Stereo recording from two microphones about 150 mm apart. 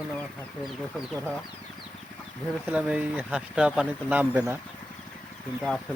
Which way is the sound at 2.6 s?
10° right (ahead or behind).